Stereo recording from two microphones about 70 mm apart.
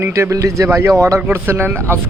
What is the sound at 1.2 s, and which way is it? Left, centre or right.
Speech, right.